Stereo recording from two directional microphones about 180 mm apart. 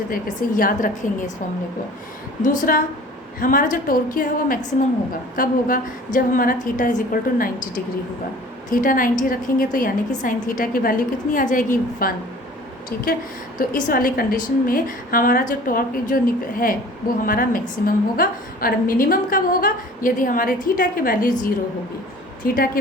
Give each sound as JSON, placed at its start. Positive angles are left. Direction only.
{"t": 0.1, "sound": "a woman's voice", "side_deg": 50}
{"t": 2.4, "sound": "a woman's voice", "side_deg": 45}
{"t": 8.7, "sound": "a woman's voice", "side_deg": 50}
{"t": 13.6, "sound": "a woman's voice", "side_deg": 50}
{"t": 22.4, "sound": "a woman's voice", "side_deg": 55}